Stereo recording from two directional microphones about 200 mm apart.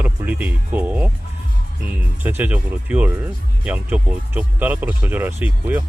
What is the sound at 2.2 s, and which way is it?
Speech, 10° right (ahead or behind).